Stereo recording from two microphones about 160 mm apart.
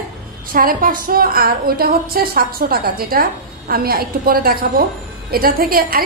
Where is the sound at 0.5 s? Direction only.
65° right (ahead or behind).